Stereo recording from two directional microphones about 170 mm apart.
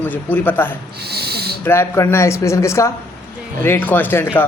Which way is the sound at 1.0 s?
70° right (ahead or behind).